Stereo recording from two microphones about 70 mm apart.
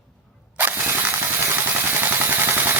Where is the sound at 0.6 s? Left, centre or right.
Right.